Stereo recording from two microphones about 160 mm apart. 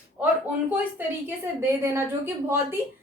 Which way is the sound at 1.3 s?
15° right (ahead or behind).